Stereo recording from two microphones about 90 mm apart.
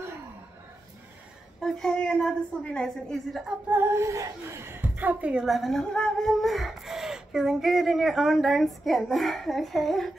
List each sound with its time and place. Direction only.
1.6 s a woman's voice: 10° left (ahead or behind)
3.7 s a woman's voice: 25° right (ahead or behind)
5.4 s speech: centre (ahead or behind)